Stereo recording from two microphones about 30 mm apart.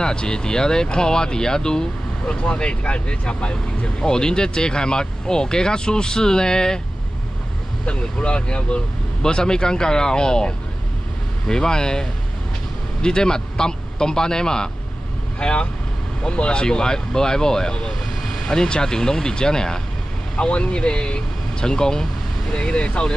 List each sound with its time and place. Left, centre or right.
0.0 s speech: left
2.4 s speech: left
4.0 s speech: left
7.8 s speech: left
9.2 s speech: left
15.3 s speech: left
16.6 s speech: left
20.3 s speech: left